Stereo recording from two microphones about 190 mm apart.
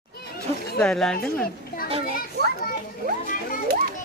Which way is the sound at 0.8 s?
5° left (ahead or behind).